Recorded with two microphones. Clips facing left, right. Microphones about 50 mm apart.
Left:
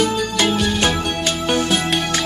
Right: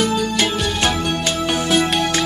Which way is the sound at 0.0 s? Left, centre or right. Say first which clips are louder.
Even; centre.